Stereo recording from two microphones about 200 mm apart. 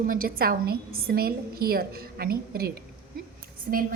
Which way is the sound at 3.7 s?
45° right (ahead or behind).